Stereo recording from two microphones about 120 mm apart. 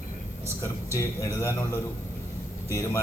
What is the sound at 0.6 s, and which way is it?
A man's voice, 25° left (ahead or behind).